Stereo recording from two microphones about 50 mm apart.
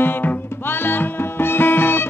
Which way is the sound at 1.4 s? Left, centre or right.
Left.